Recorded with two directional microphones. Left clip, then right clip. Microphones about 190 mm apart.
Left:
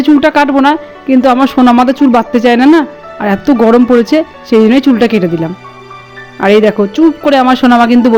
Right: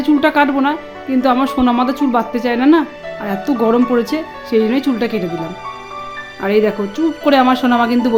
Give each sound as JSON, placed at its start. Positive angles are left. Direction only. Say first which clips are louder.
{"t": 0.0, "sound": "speech", "louder": "left 5 dB", "side_deg": 35}
{"t": 6.4, "sound": "speech", "louder": "left 8 dB", "side_deg": 40}